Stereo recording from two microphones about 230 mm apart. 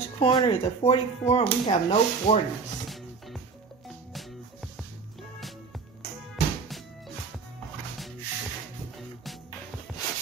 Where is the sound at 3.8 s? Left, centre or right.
Centre.